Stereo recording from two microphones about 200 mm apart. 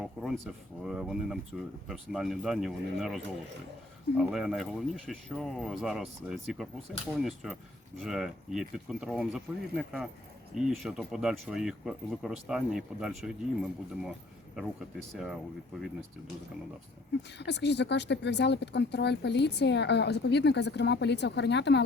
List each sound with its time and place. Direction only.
0.0 s speech: centre (ahead or behind)
4.2 s speech: centre (ahead or behind)
17.3 s speech: 60° left (ahead or behind)